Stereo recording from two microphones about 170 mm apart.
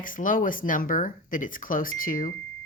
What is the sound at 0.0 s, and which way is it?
Speech, 55° left (ahead or behind).